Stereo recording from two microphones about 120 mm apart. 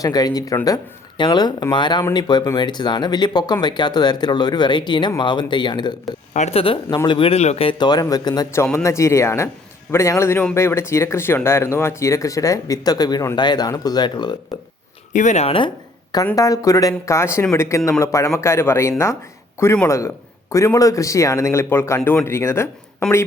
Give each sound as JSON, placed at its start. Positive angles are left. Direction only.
{"t": 0.0, "sound": "speech", "side_deg": 30}
{"t": 6.3, "sound": "speech", "side_deg": 75}
{"t": 6.9, "sound": "speech", "side_deg": 40}
{"t": 8.5, "sound": "speech", "side_deg": 20}
{"t": 15.1, "sound": "speech", "side_deg": 80}
{"t": 16.1, "sound": "speech", "side_deg": 30}